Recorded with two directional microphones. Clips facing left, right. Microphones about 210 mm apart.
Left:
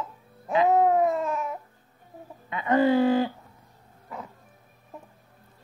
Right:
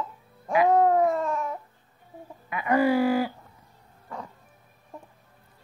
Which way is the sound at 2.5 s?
25° left (ahead or behind).